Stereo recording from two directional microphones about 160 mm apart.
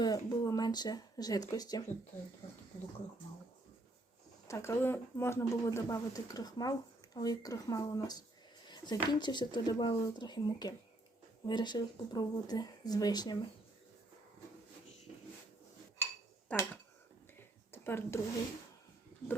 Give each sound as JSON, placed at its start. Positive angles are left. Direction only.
{"t": 0.0, "sound": "speech", "side_deg": 25}
{"t": 4.4, "sound": "speech", "side_deg": 20}
{"t": 16.5, "sound": "speech", "side_deg": 10}
{"t": 17.7, "sound": "a sound", "side_deg": 15}